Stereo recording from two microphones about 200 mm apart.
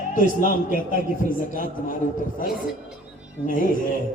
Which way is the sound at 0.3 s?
40° left (ahead or behind).